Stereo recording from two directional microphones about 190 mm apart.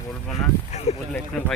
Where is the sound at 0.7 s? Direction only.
35° left (ahead or behind).